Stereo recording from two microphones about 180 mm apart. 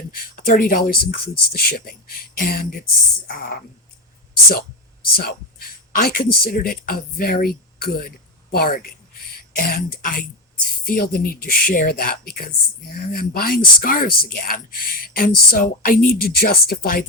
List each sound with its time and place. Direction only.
0.3 s speech: 55° left (ahead or behind)
5.1 s speech: 55° left (ahead or behind)